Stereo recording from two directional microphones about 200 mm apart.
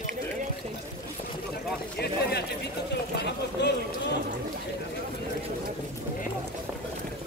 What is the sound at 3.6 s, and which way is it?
Speech, 60° left (ahead or behind).